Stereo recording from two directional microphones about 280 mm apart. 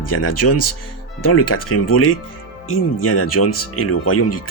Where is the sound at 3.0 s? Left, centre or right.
Left.